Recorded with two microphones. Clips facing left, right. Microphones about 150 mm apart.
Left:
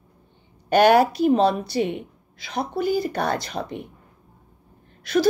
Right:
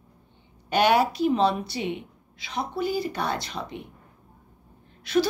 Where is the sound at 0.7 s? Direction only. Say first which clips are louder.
Left 5 dB; 45° left (ahead or behind).